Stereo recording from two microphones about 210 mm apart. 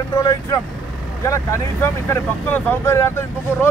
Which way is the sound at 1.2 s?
15° left (ahead or behind).